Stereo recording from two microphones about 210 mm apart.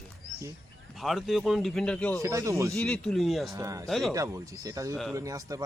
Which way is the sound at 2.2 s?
15° right (ahead or behind).